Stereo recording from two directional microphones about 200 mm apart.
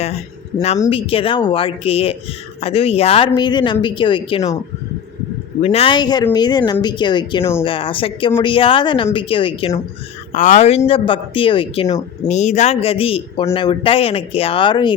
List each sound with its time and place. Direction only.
0.8 s a woman's voice: 25° left (ahead or behind)
5.6 s a woman's voice: 30° left (ahead or behind)
10.3 s a woman's voice: 35° left (ahead or behind)